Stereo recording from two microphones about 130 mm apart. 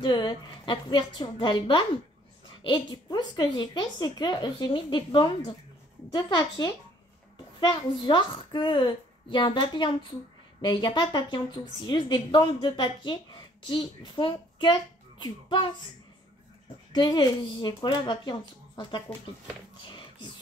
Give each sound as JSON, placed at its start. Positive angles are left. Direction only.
{"t": 0.0, "sound": "a woman's voice", "side_deg": 35}
{"t": 16.9, "sound": "a woman's voice", "side_deg": 35}